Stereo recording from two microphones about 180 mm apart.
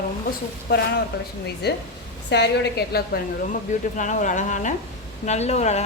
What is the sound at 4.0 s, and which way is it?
A woman's voice, 45° left (ahead or behind).